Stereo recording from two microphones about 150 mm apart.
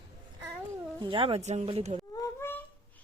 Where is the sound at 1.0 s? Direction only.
35° right (ahead or behind).